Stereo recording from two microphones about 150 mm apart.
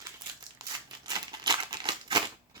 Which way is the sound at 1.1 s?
30° right (ahead or behind).